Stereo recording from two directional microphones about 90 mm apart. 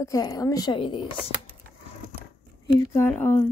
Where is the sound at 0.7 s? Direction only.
65° left (ahead or behind).